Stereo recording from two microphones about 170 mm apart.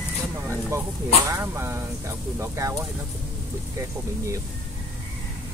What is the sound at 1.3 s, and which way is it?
Speech, 15° right (ahead or behind).